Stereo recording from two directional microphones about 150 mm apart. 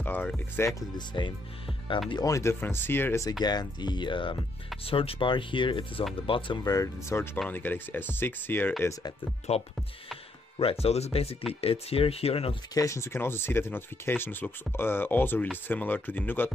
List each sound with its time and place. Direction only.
0.0 s speech: 10° left (ahead or behind)
0.7 s speech: 30° left (ahead or behind); by 8.7 s 15° left (ahead or behind)
9.5 s speech: 45° left (ahead or behind)
12.7 s speech: 20° left (ahead or behind)